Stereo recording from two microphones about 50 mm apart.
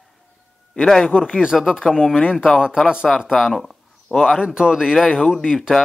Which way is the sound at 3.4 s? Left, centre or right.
Centre.